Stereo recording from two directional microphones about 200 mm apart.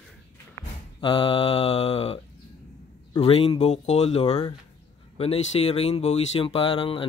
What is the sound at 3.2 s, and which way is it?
Speech, 30° left (ahead or behind).